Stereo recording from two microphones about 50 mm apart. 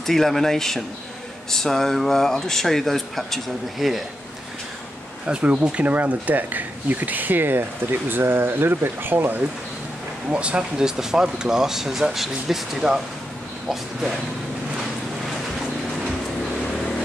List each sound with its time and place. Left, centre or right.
0.0 s speech: centre
5.2 s speech: right
10.3 s speech: right
11.0 s speech: centre